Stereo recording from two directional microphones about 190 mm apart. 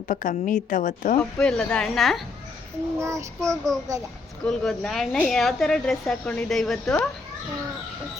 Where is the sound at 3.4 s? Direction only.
Centre (ahead or behind).